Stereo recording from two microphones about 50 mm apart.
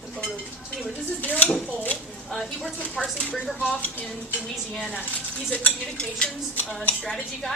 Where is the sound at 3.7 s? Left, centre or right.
Left.